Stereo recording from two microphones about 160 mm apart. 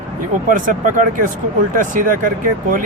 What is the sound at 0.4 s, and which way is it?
Speech, 55° right (ahead or behind).